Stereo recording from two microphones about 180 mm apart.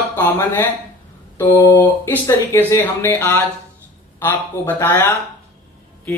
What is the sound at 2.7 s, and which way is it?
Speech, 10° left (ahead or behind).